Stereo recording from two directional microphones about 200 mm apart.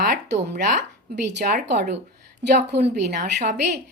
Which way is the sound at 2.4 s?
55° right (ahead or behind).